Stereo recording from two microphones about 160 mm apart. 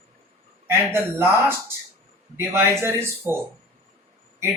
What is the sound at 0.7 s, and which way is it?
Speech, 15° right (ahead or behind).